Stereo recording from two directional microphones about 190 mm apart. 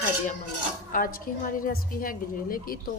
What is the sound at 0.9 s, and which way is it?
A woman's voice, 50° left (ahead or behind).